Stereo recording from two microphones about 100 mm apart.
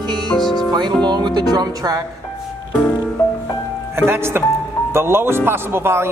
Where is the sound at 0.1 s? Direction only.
45° right (ahead or behind).